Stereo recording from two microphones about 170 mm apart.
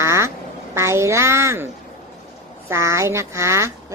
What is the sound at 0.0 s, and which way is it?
Quack, 15° right (ahead or behind).